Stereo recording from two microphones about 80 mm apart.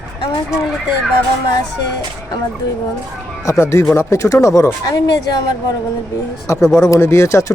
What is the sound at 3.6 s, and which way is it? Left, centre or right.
Speech, left.